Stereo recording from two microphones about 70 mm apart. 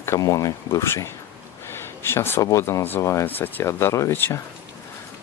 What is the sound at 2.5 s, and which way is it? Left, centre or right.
Speech, left.